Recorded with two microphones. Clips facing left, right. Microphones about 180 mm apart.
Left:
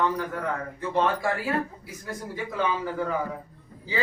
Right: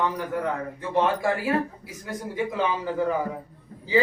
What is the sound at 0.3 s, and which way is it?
A man's voice, 15° right (ahead or behind).